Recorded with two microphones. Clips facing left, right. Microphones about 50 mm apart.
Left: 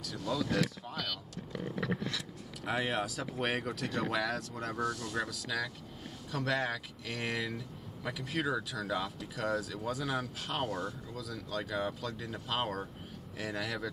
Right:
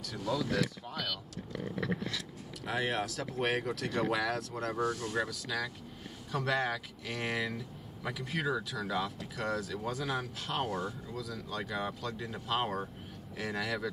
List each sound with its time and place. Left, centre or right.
0.4 s speech: centre
2.6 s speech: centre
4.7 s speech: right
5.3 s speech: centre